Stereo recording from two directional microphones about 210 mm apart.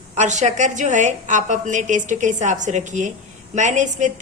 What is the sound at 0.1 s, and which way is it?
A woman's voice, 35° right (ahead or behind).